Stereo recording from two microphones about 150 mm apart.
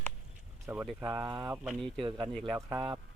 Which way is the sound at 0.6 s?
15° right (ahead or behind).